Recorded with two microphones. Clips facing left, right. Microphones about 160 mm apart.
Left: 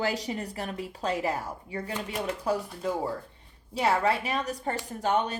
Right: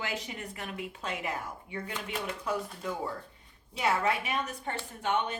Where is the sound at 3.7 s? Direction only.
35° left (ahead or behind).